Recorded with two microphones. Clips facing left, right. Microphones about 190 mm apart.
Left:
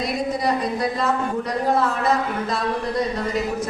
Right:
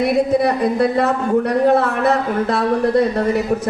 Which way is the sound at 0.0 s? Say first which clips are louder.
Right 8 dB; 60° right (ahead or behind).